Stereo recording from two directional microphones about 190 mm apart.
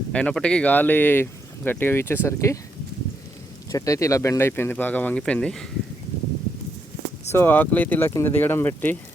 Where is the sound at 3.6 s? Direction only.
15° left (ahead or behind).